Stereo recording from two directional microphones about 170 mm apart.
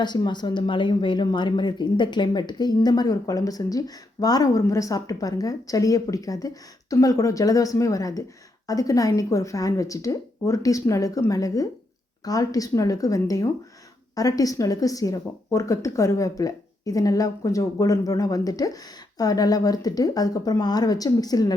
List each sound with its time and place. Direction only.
0.0 s speech: 25° left (ahead or behind)